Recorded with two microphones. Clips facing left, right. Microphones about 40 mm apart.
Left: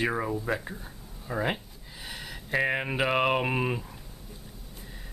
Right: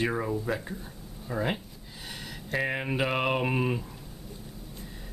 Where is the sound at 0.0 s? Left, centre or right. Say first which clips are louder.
Even; centre.